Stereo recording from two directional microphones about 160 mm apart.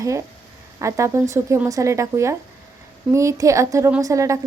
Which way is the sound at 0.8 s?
20° right (ahead or behind).